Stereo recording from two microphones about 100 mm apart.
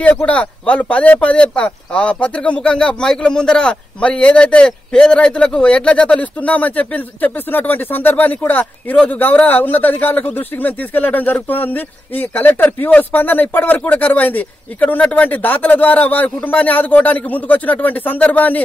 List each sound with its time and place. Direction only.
0.0 s a man's voice: 10° left (ahead or behind)